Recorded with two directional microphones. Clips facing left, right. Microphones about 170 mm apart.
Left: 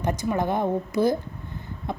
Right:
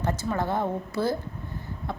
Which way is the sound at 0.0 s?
15° left (ahead or behind).